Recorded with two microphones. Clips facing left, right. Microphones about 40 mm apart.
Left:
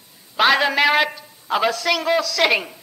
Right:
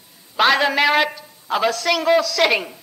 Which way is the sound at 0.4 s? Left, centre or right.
Centre.